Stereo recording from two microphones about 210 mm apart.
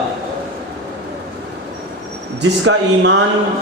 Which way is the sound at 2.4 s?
55° right (ahead or behind).